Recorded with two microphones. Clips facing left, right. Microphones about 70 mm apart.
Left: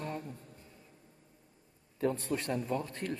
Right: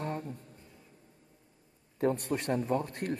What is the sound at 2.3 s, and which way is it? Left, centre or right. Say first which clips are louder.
Speech: right 3 dB; right.